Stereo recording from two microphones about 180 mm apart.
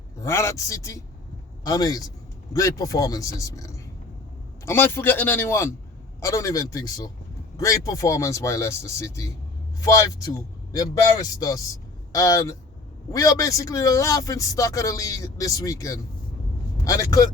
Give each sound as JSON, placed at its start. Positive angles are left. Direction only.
{"t": 0.2, "sound": "speech", "side_deg": 15}